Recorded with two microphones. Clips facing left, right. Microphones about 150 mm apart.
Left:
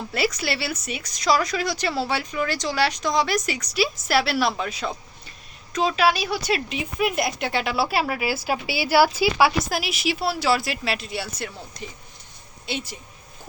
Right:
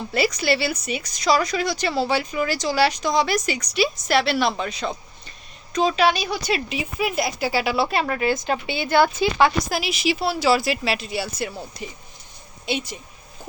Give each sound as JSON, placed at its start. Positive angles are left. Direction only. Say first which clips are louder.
{"t": 0.1, "sound": "a woman's voice", "louder": "right 4 dB", "side_deg": 0}